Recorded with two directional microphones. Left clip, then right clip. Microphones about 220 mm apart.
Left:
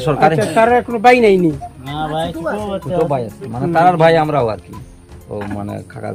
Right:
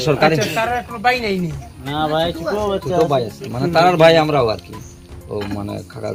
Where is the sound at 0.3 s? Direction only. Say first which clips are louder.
Left 7 dB; 45° left (ahead or behind).